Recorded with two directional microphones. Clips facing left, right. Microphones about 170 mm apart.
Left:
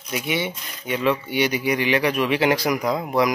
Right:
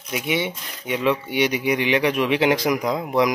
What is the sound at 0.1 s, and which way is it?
Speech, 15° right (ahead or behind).